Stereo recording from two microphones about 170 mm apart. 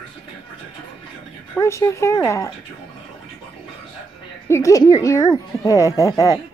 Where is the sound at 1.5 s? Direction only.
15° left (ahead or behind).